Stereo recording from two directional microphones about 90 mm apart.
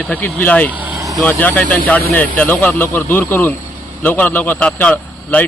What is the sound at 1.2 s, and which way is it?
Speech, 20° left (ahead or behind).